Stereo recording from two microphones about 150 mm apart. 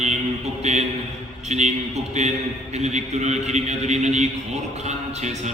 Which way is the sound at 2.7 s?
50° right (ahead or behind).